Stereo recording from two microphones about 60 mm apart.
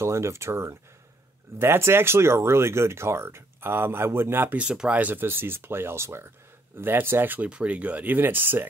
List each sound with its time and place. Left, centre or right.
0.0 s speech: right
4.6 s speech: centre; by 7.4 s right
7.4 s speech: right